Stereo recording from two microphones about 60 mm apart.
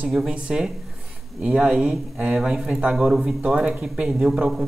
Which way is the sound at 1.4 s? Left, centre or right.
Centre.